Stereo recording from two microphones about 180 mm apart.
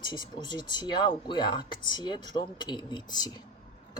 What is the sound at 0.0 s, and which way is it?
Speech, 25° left (ahead or behind).